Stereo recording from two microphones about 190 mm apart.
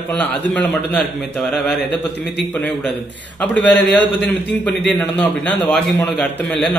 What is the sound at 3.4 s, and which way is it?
A man's voice, 5° left (ahead or behind).